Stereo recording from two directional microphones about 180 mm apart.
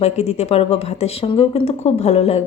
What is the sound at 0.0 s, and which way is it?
Speech, 35° left (ahead or behind).